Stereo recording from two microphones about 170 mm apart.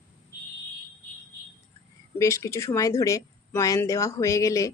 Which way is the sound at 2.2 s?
20° left (ahead or behind).